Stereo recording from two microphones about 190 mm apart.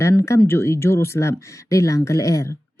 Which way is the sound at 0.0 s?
15° left (ahead or behind).